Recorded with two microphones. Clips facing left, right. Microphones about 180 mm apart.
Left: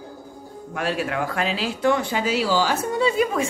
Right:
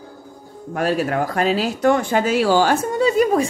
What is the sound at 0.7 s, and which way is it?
A woman's voice, 45° right (ahead or behind).